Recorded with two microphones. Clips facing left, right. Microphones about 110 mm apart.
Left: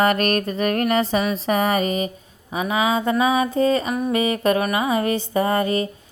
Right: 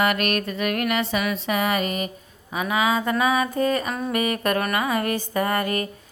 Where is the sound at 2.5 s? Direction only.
25° left (ahead or behind).